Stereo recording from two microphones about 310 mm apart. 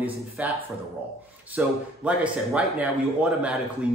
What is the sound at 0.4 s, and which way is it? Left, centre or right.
Speech, centre.